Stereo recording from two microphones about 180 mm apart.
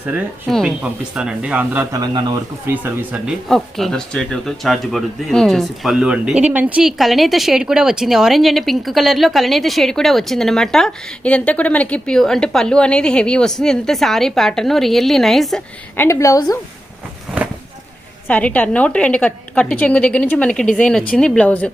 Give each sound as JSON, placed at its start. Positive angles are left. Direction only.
{"t": 0.4, "sound": "speech", "side_deg": 0}
{"t": 3.5, "sound": "speech", "side_deg": 0}
{"t": 16.0, "sound": "a woman's voice", "side_deg": 15}
{"t": 18.3, "sound": "a woman's voice", "side_deg": 10}